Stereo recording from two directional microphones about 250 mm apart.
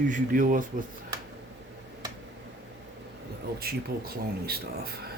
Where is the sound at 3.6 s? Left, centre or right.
Right.